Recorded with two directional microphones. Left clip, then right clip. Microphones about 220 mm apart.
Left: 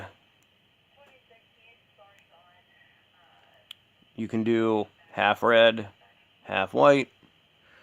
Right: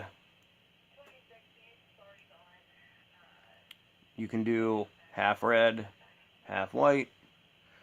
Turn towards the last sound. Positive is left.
turn(degrees=35)  # may be behind; listen again after turning